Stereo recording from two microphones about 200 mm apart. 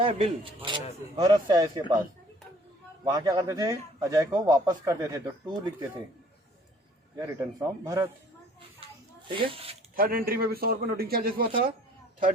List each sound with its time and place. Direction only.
0.0 s a man's voice: 25° right (ahead or behind)
3.1 s a man's voice: 20° right (ahead or behind)
7.2 s speech: 20° right (ahead or behind)
9.2 s a man's voice: 25° right (ahead or behind)
9.9 s a man's voice: 45° right (ahead or behind)